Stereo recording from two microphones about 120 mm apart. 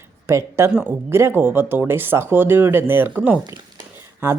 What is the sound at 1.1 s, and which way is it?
Speech, 20° right (ahead or behind).